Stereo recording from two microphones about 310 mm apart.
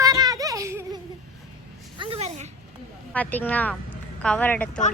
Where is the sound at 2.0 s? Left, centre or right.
Centre.